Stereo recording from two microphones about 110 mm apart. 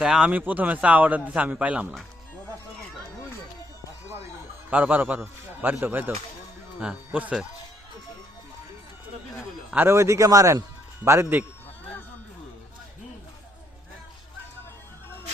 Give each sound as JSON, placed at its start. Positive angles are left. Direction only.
{"t": 0.0, "sound": "a man's voice", "side_deg": -10}
{"t": 4.7, "sound": "a man's voice", "side_deg": -15}
{"t": 9.7, "sound": "speech", "side_deg": -25}